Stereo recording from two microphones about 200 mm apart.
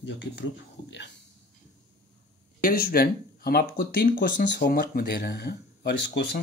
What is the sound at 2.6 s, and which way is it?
Speech, 50° left (ahead or behind).